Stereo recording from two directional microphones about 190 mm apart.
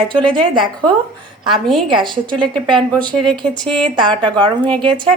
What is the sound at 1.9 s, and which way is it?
Speech, 25° right (ahead or behind).